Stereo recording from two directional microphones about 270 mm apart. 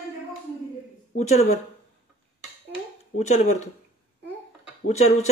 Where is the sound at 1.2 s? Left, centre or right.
Left.